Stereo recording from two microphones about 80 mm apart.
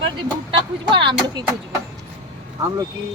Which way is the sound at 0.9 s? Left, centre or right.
Right.